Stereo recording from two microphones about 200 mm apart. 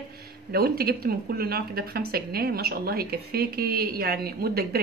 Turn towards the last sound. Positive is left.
turn(degrees=-50)  # may be behind; listen again after turning